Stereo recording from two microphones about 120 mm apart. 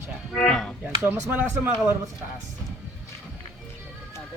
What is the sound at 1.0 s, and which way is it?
Speech, 15° right (ahead or behind).